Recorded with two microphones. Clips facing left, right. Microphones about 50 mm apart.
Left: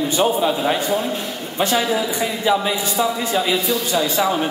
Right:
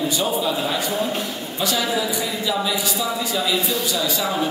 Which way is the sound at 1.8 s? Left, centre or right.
Left.